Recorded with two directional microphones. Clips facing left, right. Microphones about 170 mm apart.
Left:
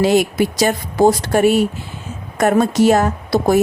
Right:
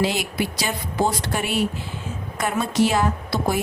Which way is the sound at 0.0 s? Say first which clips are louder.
Left 9 dB; 45° left (ahead or behind).